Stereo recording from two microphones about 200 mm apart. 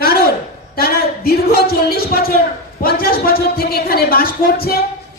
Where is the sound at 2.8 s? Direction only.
50° left (ahead or behind).